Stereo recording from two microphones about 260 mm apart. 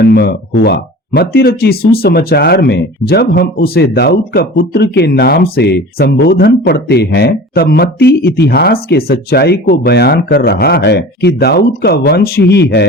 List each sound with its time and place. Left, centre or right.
0.0 s speech: left